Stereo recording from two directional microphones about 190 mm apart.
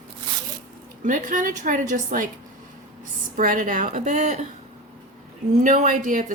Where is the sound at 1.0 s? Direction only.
45° right (ahead or behind).